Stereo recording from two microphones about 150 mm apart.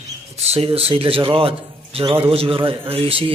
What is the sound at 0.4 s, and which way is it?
A man's voice, 40° right (ahead or behind).